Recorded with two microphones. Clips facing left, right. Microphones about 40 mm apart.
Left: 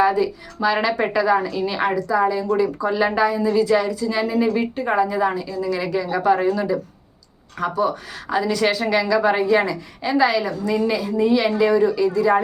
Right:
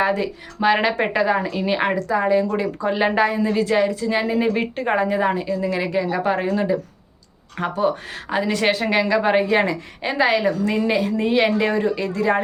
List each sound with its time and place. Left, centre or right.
0.0 s a woman's voice: right